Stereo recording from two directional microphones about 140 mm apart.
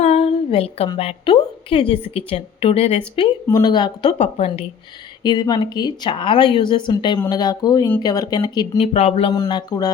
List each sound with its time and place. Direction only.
0.0 s a sound: 50° left (ahead or behind)
0.9 s a woman's voice: 40° left (ahead or behind)
3.4 s a woman's voice: 25° left (ahead or behind)
4.2 s a woman's voice: 45° left (ahead or behind)
5.2 s a woman's voice: 30° left (ahead or behind)
8.9 s a woman's voice: 50° left (ahead or behind)
9.3 s speech: 30° left (ahead or behind)